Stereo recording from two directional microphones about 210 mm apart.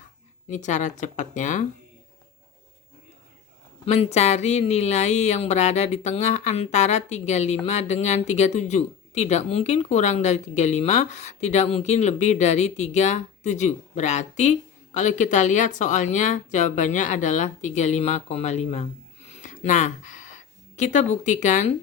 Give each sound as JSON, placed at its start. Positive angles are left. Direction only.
{"t": 0.5, "sound": "speech", "side_deg": 35}
{"t": 3.8, "sound": "speech", "side_deg": 30}